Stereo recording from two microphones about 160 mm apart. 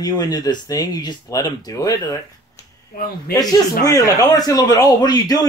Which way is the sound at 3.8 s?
20° left (ahead or behind).